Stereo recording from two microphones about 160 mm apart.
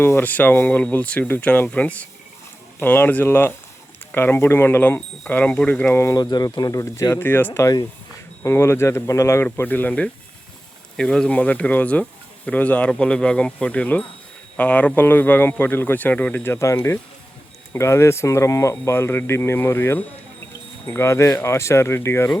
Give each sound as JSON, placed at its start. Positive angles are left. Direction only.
{"t": 0.0, "sound": "speech", "side_deg": 15}